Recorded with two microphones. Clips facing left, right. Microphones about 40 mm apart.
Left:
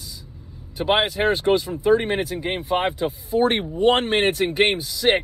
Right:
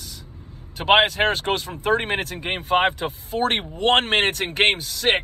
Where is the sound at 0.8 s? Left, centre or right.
Right.